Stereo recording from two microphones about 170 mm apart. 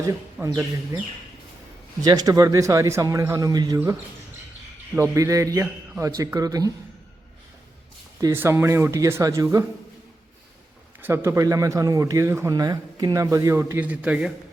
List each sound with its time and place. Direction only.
0.0 s a man's voice: 20° right (ahead or behind)
2.0 s speech: 20° right (ahead or behind)
4.9 s a man's voice: 15° right (ahead or behind)
8.2 s a man's voice: 15° right (ahead or behind)
11.0 s a man's voice: 15° right (ahead or behind)